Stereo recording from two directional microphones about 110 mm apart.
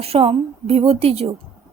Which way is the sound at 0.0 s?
65° right (ahead or behind).